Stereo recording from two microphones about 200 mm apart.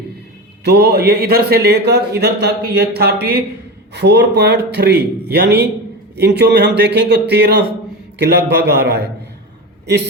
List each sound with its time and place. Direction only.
0.6 s a man's voice: 55° right (ahead or behind)